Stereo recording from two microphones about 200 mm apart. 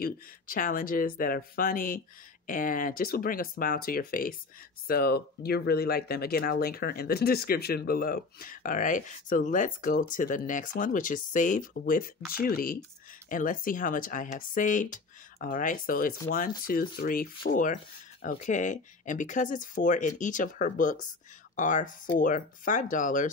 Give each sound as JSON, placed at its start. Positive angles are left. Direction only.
{"t": 0.0, "sound": "speech", "side_deg": 45}